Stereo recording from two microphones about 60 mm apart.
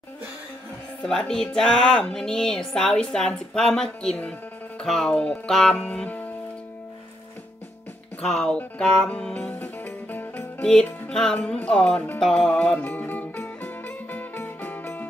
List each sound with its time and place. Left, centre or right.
1.0 s a woman's voice: centre
4.2 s music: centre
4.8 s speech: centre
5.1 s music: left
5.5 s a woman's voice: centre
5.9 s music: left
8.2 s a woman's voice: centre
9.3 s music: left
10.6 s music: centre
11.4 s a woman's voice: centre
12.8 s music: left